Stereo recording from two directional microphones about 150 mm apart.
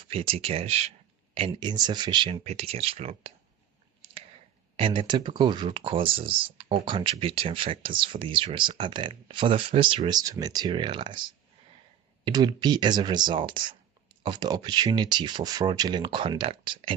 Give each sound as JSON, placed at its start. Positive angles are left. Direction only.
{"t": 0.0, "sound": "speech", "side_deg": -40}
{"t": 2.4, "sound": "speech", "side_deg": -45}
{"t": 4.7, "sound": "speech", "side_deg": -35}